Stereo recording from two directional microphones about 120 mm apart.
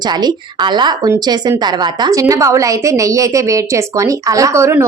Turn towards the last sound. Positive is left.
turn(degrees=-25)  # may be behind; listen again after turning